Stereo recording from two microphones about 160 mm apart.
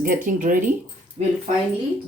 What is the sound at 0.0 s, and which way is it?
Speech, 60° right (ahead or behind).